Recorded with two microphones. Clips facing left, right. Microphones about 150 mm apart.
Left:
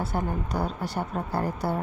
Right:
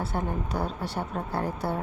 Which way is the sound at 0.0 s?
Centre (ahead or behind).